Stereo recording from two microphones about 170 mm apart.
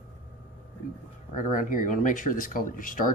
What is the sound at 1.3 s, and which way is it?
Speech, 50° left (ahead or behind).